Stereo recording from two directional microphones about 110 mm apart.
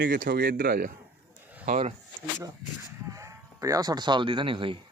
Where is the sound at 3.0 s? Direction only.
30° right (ahead or behind); by 4.7 s 50° right (ahead or behind).